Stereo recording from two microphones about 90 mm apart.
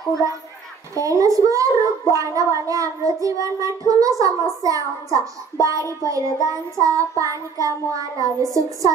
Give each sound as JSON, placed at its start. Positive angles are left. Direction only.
{"t": 0.9, "sound": "a child's voice", "side_deg": -40}